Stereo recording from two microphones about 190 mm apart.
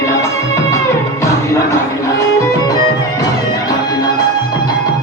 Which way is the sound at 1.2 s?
15° left (ahead or behind).